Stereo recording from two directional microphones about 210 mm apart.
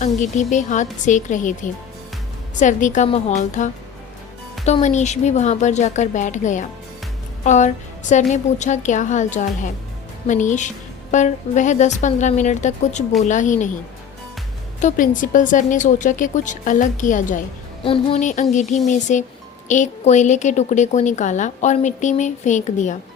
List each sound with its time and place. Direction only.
0.0 s a woman's voice: 35° left (ahead or behind)
2.6 s a woman's voice: 35° left (ahead or behind)
14.8 s a woman's voice: 35° left (ahead or behind)
17.8 s a woman's voice: 25° left (ahead or behind)